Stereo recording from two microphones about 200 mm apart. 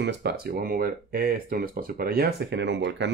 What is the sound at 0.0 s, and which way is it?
Speech, 55° right (ahead or behind).